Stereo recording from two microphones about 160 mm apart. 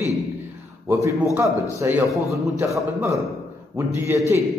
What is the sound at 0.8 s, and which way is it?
A man's voice, 20° right (ahead or behind).